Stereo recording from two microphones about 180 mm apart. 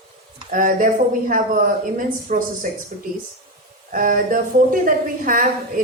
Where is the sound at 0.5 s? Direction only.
50° right (ahead or behind).